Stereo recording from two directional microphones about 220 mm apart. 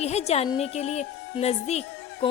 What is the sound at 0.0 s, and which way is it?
A woman's voice, 30° left (ahead or behind).